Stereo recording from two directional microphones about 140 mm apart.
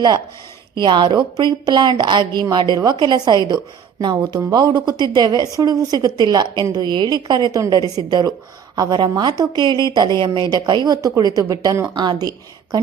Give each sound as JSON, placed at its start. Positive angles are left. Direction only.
{"t": 0.8, "sound": "a woman's voice", "side_deg": -35}